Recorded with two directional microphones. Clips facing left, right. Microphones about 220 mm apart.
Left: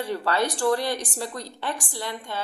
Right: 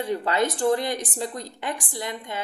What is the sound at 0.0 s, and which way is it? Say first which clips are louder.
A woman's voice: right 1 dB; 20° right (ahead or behind).